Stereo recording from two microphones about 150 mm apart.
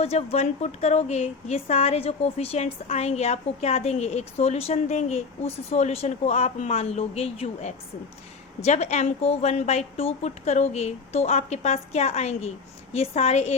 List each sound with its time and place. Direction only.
0.0 s speech: 45° left (ahead or behind)